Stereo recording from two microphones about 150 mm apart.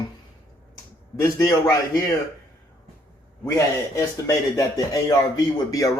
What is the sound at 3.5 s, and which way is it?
Speech, 20° left (ahead or behind).